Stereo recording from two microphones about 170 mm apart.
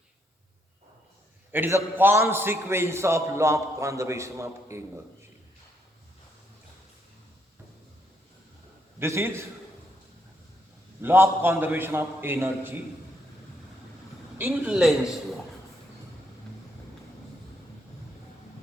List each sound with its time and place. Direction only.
1.5 s a man's voice: 10° right (ahead or behind)
9.0 s a man's voice: 15° right (ahead or behind)
11.0 s a man's voice: 15° right (ahead or behind)
14.3 s a man's voice: 15° right (ahead or behind)
14.7 s a man's voice: 5° right (ahead or behind)